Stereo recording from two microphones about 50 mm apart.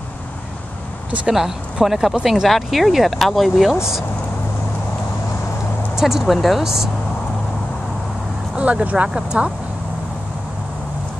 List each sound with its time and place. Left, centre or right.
1.2 s speech: centre
5.9 s speech: centre
8.5 s speech: right